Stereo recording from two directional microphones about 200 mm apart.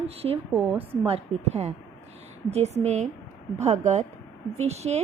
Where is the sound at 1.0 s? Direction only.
30° right (ahead or behind).